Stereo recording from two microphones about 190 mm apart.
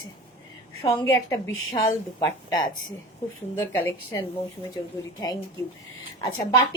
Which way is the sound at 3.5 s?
10° left (ahead or behind).